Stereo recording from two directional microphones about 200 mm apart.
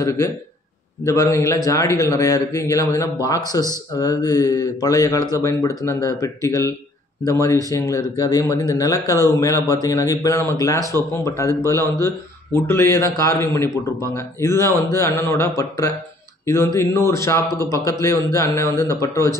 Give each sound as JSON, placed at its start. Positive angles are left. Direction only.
{"t": 0.0, "sound": "speech", "side_deg": 15}